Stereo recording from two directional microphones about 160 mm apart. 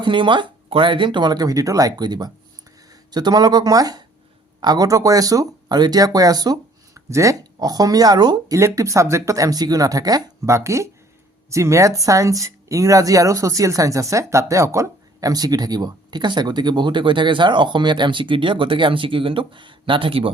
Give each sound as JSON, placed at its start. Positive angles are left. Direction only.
{"t": 0.0, "sound": "speech", "side_deg": -30}